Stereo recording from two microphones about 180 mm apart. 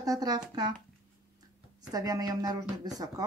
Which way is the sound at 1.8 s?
20° right (ahead or behind).